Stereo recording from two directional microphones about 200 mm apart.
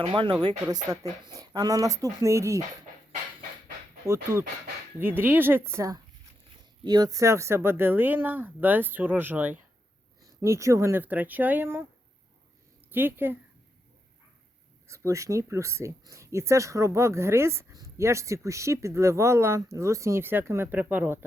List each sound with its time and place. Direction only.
0.0 s speech: 25° right (ahead or behind)
4.0 s speech: 15° right (ahead or behind)
12.9 s speech: 10° right (ahead or behind)
14.8 s speech: 15° right (ahead or behind)